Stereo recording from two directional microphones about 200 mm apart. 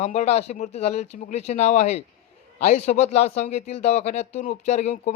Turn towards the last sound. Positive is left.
turn(degrees=35)  # may be behind; listen again after turning